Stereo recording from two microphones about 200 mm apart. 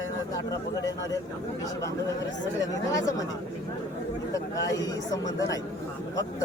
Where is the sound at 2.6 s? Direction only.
15° left (ahead or behind).